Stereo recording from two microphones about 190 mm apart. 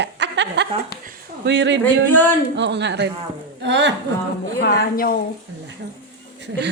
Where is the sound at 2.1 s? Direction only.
10° left (ahead or behind).